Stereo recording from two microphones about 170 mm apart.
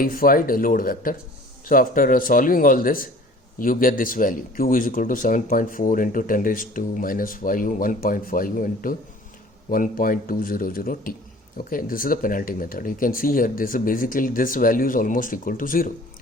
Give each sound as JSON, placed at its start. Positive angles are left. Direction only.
{"t": 0.0, "sound": "speech", "side_deg": 55}